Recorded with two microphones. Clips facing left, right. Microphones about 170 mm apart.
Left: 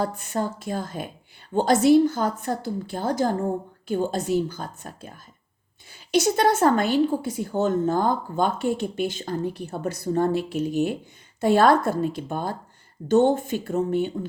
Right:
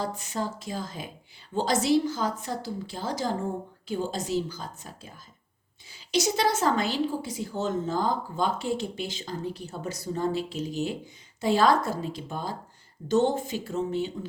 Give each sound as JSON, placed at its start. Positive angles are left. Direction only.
{"t": 0.0, "sound": "a woman's voice", "side_deg": 55}